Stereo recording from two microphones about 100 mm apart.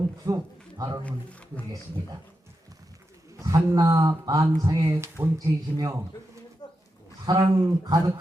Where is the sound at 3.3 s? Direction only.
35° right (ahead or behind).